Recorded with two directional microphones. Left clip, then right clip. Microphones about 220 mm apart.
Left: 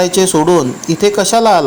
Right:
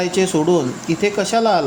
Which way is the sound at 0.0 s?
20° left (ahead or behind).